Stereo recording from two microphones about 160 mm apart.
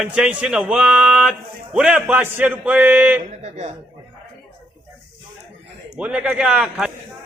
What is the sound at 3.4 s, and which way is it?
Speech, 45° right (ahead or behind).